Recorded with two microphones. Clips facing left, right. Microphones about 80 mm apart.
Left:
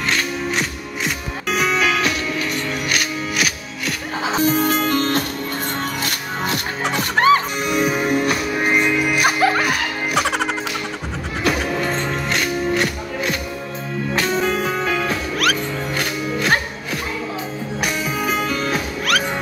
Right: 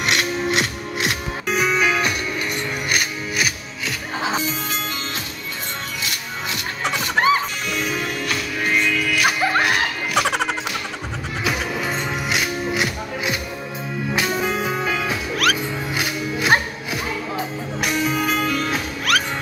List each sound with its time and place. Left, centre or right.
1.5 s music: centre
4.4 s music: left
7.2 s music: centre
7.7 s music: centre
10.1 s music: centre
15.3 s music: centre
16.0 s music: centre
17.7 s music: centre